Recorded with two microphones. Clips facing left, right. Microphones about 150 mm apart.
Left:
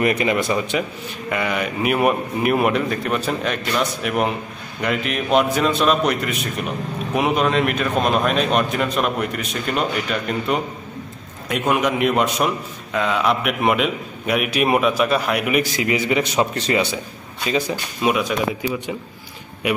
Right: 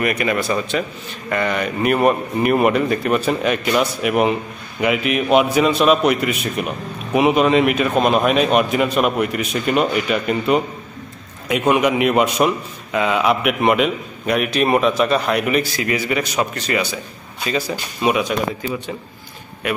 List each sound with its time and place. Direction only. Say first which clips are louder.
0.0 s a man's voice: left 1 dB; 25° left (ahead or behind); by 15.6 s 10° left (ahead or behind)
15.8 s speech: left 1 dB; 20° left (ahead or behind)
18.0 s a man's voice: right 2 dB; centre (ahead or behind)